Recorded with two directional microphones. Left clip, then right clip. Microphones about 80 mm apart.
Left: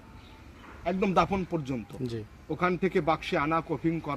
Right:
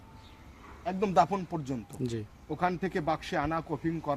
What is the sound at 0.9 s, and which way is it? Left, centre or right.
Speech, right.